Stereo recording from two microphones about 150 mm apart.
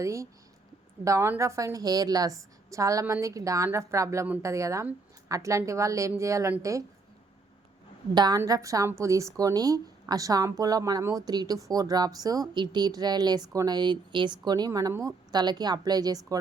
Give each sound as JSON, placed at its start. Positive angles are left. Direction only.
{"t": 0.0, "sound": "a woman's voice", "side_deg": -20}
{"t": 8.1, "sound": "a woman's voice", "side_deg": -30}